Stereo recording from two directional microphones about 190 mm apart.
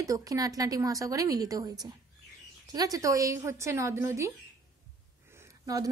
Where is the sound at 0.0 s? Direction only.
20° right (ahead or behind).